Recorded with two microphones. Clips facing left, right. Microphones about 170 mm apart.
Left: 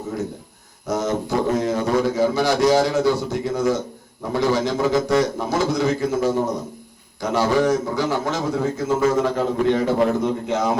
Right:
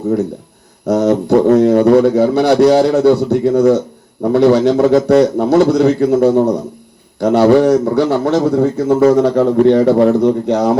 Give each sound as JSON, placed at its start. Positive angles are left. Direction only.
{"t": 0.9, "sound": "speech", "side_deg": -65}